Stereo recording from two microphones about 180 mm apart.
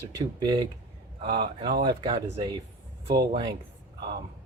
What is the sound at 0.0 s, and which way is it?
Speech, 20° right (ahead or behind).